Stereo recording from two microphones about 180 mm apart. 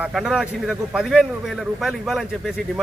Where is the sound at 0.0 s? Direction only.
5° right (ahead or behind).